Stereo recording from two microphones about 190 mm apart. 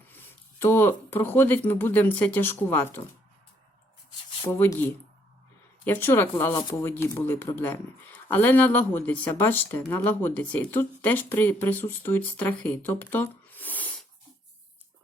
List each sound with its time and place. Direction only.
0.1 s speech: 10° left (ahead or behind)
4.4 s speech: 10° left (ahead or behind)